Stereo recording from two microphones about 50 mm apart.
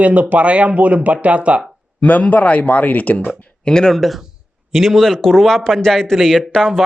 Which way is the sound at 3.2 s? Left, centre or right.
Centre.